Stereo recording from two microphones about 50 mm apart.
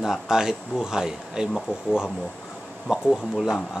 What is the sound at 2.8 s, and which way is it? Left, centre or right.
Speech, centre.